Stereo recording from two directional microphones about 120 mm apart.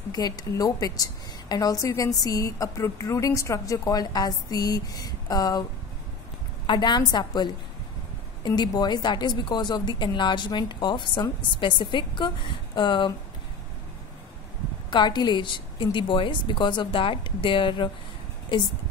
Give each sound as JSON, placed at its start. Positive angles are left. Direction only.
{"t": 0.1, "sound": "a woman's voice", "side_deg": 30}
{"t": 8.5, "sound": "a woman's voice", "side_deg": 35}
{"t": 14.9, "sound": "a woman's voice", "side_deg": 40}